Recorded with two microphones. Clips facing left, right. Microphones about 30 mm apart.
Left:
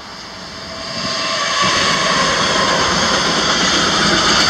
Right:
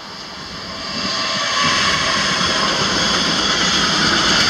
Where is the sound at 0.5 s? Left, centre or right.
Centre.